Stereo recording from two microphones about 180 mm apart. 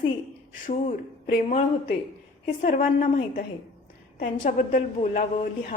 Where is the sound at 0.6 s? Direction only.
45° left (ahead or behind).